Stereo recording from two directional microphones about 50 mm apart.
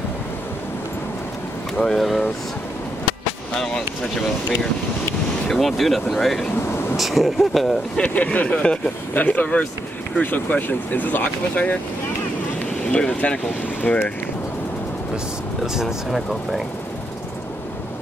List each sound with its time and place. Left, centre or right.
1.8 s speech: centre
3.5 s speech: centre
5.5 s speech: centre
8.0 s speech: left
12.9 s speech: left
15.6 s speech: centre